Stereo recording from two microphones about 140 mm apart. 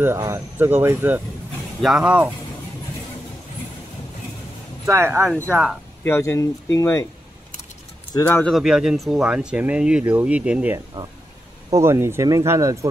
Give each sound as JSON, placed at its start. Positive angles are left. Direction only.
{"t": 0.0, "sound": "speech", "side_deg": -20}
{"t": 1.8, "sound": "speech", "side_deg": -5}
{"t": 4.8, "sound": "speech", "side_deg": -20}
{"t": 6.0, "sound": "speech", "side_deg": 20}
{"t": 8.1, "sound": "speech", "side_deg": 20}
{"t": 8.5, "sound": "speech", "side_deg": -5}